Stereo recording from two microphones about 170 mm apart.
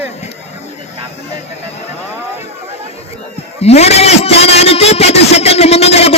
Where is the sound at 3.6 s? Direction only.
40° left (ahead or behind).